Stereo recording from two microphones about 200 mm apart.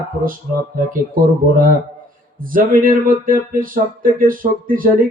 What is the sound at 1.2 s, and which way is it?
Speech, 45° right (ahead or behind).